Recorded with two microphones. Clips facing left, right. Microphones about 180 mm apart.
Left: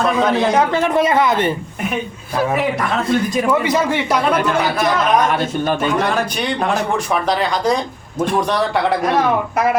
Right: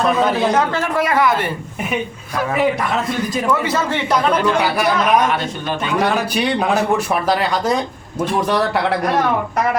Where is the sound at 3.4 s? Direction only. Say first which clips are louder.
Left 2 dB; 15° left (ahead or behind).